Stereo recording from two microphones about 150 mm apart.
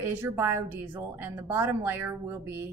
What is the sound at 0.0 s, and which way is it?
Speech, 15° right (ahead or behind).